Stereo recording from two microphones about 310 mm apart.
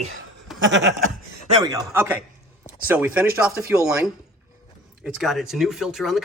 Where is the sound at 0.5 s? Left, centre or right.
Right.